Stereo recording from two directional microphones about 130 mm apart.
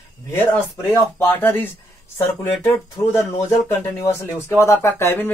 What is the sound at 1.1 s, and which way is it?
Speech, 15° left (ahead or behind).